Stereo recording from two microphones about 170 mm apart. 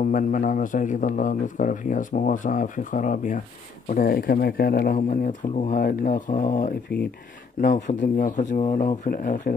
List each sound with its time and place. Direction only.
0.0 s a man's voice: 50° left (ahead or behind)